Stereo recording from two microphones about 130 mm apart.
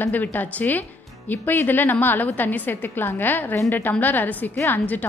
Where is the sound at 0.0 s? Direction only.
15° left (ahead or behind).